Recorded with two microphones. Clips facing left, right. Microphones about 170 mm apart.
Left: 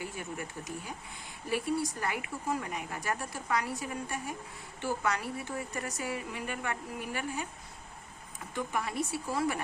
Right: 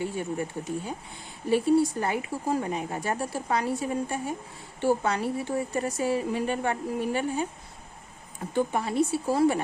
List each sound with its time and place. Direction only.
0.0 s speech: 30° right (ahead or behind)
8.5 s speech: 30° right (ahead or behind)